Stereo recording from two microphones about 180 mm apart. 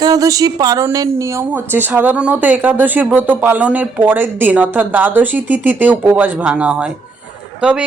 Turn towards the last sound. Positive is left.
turn(degrees=-5)  # may be behind; listen again after turning